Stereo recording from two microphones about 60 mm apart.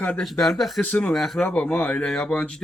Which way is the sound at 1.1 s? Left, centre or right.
Centre.